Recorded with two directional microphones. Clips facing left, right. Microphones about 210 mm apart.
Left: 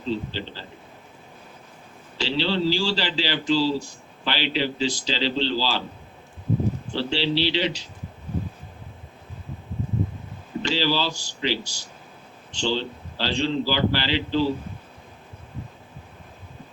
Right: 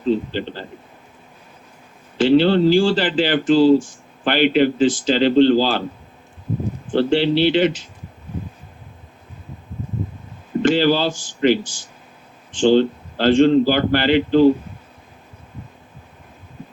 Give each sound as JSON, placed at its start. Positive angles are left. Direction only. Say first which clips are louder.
{"t": 0.0, "sound": "a man's voice", "louder": "right 8 dB", "side_deg": -55}
{"t": 2.1, "sound": "a man's voice", "louder": "right 11 dB", "side_deg": -50}
{"t": 6.9, "sound": "a man's voice", "louder": "right 10 dB", "side_deg": -55}
{"t": 10.6, "sound": "a man's voice", "louder": "right 9 dB", "side_deg": -50}